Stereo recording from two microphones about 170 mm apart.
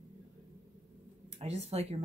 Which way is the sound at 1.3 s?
40° right (ahead or behind).